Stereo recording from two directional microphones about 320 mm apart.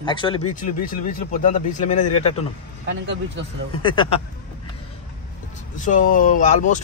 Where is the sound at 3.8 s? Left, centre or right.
Centre.